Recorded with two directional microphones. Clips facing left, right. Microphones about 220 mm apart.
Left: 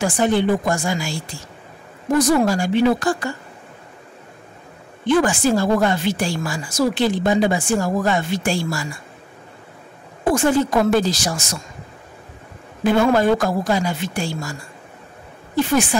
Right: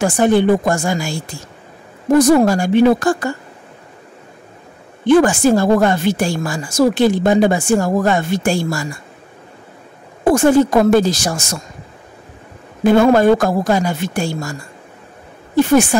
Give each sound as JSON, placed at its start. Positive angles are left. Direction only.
{"t": 0.0, "sound": "a woman's voice", "side_deg": -50}
{"t": 5.0, "sound": "a woman's voice", "side_deg": -45}
{"t": 10.2, "sound": "a woman's voice", "side_deg": -45}
{"t": 12.8, "sound": "a woman's voice", "side_deg": -45}
{"t": 15.5, "sound": "a woman's voice", "side_deg": -45}